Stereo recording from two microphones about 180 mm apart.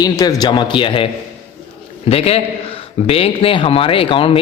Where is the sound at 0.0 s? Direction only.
20° left (ahead or behind).